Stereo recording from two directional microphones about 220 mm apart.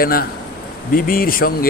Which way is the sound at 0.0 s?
40° left (ahead or behind).